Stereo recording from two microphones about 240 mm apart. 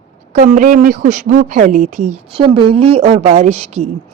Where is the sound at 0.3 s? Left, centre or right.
Right.